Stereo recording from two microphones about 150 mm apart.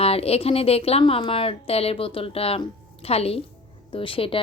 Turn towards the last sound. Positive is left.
turn(degrees=35)  # may be behind; listen again after turning